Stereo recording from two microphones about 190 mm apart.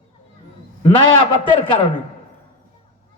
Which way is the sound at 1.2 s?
25° left (ahead or behind).